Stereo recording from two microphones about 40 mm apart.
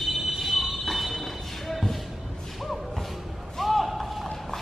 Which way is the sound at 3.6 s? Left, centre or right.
Centre.